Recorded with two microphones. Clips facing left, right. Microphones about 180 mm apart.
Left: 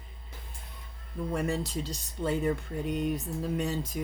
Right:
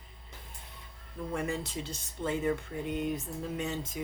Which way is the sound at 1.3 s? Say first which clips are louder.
Left 3 dB; 35° left (ahead or behind).